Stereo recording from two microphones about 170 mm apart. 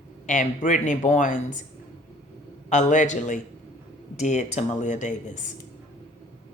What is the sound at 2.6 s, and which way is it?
Speech, 45° left (ahead or behind).